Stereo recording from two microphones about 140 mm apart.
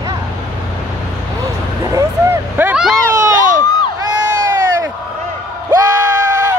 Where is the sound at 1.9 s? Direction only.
20° right (ahead or behind).